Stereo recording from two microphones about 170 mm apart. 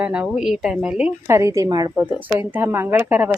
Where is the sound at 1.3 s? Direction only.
15° right (ahead or behind).